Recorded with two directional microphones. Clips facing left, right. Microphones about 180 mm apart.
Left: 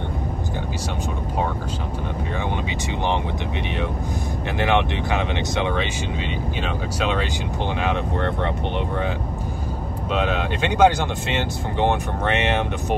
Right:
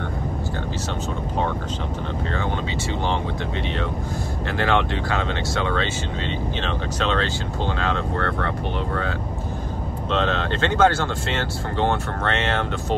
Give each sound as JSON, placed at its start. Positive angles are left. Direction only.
{"t": 4.6, "sound": "speech", "side_deg": 20}
{"t": 10.1, "sound": "speech", "side_deg": 10}